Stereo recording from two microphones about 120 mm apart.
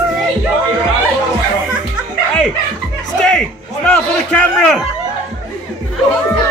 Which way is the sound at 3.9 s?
10° left (ahead or behind).